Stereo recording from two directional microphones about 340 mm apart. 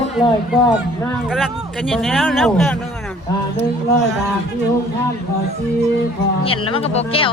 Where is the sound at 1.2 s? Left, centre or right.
Centre.